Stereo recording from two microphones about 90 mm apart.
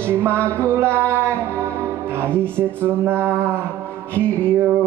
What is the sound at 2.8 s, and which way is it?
Mantra, 25° right (ahead or behind).